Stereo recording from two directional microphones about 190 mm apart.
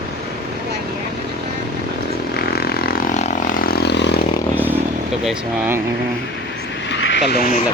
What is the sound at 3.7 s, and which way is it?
Vehicle, 60° left (ahead or behind).